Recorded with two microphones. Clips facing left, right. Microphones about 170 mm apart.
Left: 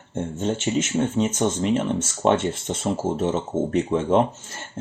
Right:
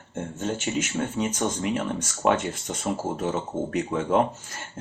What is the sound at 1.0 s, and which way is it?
Speech, 25° left (ahead or behind).